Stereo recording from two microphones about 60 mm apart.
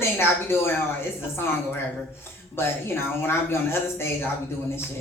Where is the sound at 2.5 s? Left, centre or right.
Left.